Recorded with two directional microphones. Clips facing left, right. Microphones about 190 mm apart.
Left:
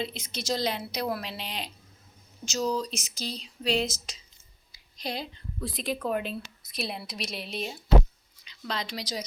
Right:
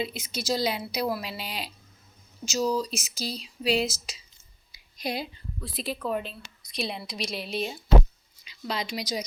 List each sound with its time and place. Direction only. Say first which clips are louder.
0.0 s a woman's voice: right 2 dB; 10° right (ahead or behind)